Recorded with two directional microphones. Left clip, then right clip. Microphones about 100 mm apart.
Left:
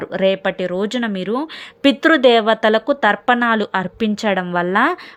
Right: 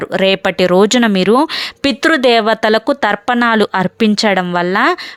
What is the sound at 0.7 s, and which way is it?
Speech, 80° right.